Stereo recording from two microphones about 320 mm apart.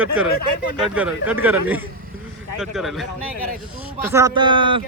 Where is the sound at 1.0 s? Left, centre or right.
Centre.